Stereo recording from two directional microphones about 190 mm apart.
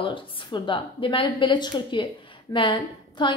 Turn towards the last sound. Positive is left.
turn(degrees=25)  # may be behind; listen again after turning